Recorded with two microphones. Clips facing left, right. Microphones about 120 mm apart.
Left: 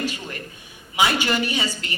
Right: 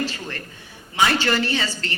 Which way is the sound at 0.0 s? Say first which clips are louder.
Right 1 dB; 15° left (ahead or behind).